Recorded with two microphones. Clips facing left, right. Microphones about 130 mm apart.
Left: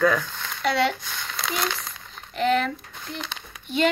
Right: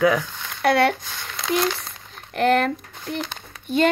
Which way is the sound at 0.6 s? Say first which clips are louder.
Right 5 dB; 60° right (ahead or behind).